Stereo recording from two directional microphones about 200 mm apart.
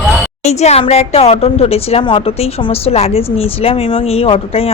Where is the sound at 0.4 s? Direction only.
35° left (ahead or behind).